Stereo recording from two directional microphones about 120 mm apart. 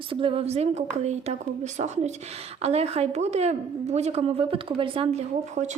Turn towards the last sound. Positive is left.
turn(degrees=-80)